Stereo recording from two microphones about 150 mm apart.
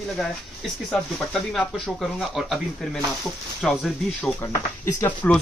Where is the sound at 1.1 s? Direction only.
Centre (ahead or behind).